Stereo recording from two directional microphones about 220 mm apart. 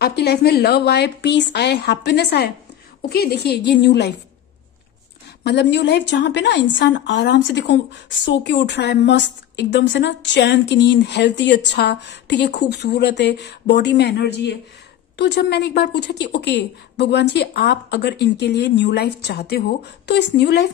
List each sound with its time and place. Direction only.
0.0 s a woman's voice: 45° left (ahead or behind)
5.4 s a woman's voice: 50° left (ahead or behind)